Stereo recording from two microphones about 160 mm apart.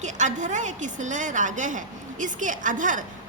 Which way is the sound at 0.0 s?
50° right (ahead or behind).